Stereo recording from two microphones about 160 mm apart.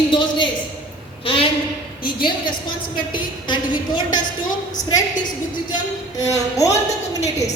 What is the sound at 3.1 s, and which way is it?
A woman's voice, 30° left (ahead or behind).